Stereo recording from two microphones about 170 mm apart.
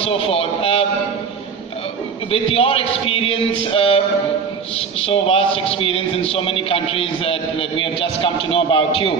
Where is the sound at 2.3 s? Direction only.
35° left (ahead or behind).